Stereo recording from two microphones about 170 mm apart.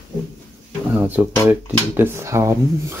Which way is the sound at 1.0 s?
10° right (ahead or behind).